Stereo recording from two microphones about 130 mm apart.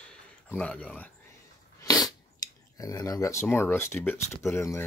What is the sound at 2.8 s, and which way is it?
Speech, 25° left (ahead or behind).